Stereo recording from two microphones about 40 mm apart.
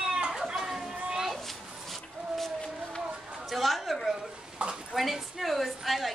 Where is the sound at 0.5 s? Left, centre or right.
Centre.